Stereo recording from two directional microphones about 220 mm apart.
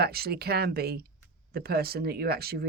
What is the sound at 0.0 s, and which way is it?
Speech, 45° right (ahead or behind).